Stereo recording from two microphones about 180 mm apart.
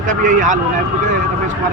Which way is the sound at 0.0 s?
45° right (ahead or behind).